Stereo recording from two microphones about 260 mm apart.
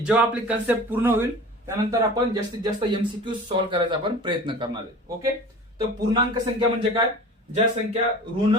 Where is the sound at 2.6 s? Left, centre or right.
Centre.